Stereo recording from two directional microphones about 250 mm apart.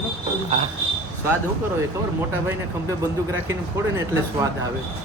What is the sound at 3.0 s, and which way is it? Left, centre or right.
Speech, centre.